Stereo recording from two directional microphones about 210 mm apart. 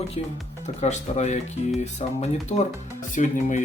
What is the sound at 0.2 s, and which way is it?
Speech, 30° left (ahead or behind).